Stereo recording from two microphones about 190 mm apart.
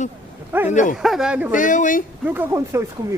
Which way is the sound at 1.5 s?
45° left (ahead or behind).